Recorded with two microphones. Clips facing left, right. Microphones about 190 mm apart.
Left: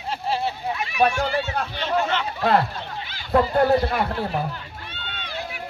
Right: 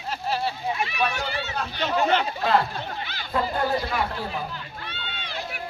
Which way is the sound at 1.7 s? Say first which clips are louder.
Right 2 dB; 40° right (ahead or behind).